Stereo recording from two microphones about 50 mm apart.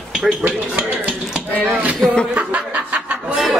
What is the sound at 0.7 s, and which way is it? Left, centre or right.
Speech, right.